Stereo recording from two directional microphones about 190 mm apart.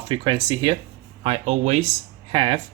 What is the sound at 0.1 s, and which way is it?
Speech, 25° right (ahead or behind).